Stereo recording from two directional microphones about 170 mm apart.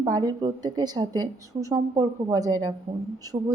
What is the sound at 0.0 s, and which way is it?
Speech, 20° right (ahead or behind).